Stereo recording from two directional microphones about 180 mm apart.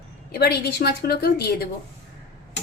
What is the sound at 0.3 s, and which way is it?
A woman's voice, 60° left (ahead or behind).